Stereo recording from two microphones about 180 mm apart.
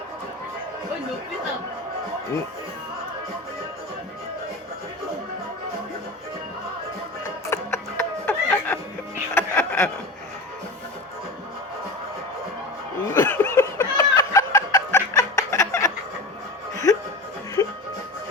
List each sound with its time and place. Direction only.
7.5 s music: 15° left (ahead or behind)
13.1 s laughter: 10° left (ahead or behind)
16.7 s music: 15° left (ahead or behind)